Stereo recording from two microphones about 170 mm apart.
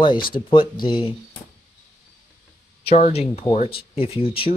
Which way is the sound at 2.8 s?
40° left (ahead or behind).